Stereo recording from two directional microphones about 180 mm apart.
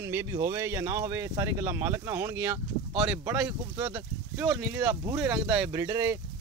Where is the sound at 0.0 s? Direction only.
15° right (ahead or behind).